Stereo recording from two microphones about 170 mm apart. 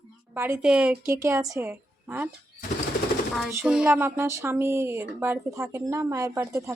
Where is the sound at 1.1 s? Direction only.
15° right (ahead or behind).